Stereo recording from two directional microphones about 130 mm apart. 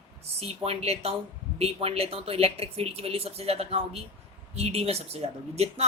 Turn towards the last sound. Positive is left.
turn(degrees=-55)  # may be behind; listen again after turning